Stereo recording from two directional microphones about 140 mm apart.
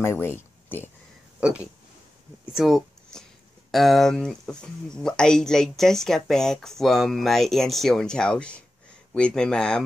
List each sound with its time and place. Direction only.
0.0 s speech: 15° left (ahead or behind)
1.4 s speech: 10° right (ahead or behind)